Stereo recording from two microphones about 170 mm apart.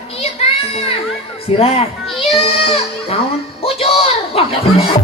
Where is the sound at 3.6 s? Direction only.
35° left (ahead or behind).